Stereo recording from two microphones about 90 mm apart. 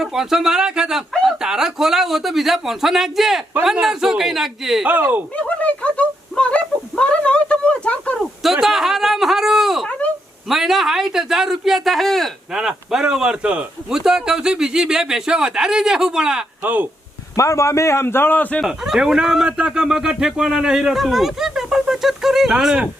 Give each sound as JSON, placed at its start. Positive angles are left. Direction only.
{"t": 0.0, "sound": "speech", "side_deg": -5}
{"t": 4.9, "sound": "speech", "side_deg": -20}
{"t": 5.4, "sound": "a sound", "side_deg": 15}
{"t": 8.5, "sound": "a sound", "side_deg": -5}
{"t": 10.5, "sound": "speech", "side_deg": 0}
{"t": 16.6, "sound": "speech", "side_deg": -20}
{"t": 17.3, "sound": "a man's voice", "side_deg": 35}
{"t": 18.6, "sound": "speech", "side_deg": -5}